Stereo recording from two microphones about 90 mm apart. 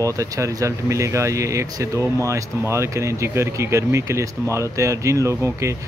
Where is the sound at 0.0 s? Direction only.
35° right (ahead or behind).